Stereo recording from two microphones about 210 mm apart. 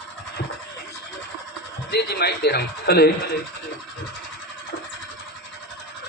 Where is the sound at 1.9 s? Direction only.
50° left (ahead or behind).